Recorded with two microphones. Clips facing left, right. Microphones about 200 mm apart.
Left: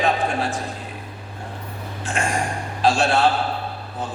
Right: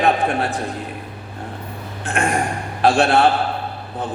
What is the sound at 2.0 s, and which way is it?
A man's voice, 60° right (ahead or behind).